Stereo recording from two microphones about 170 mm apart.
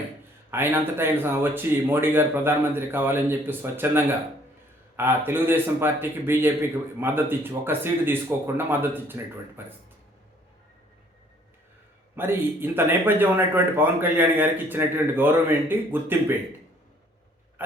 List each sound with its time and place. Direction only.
0.5 s speech: 15° right (ahead or behind)
12.1 s speech: 15° right (ahead or behind)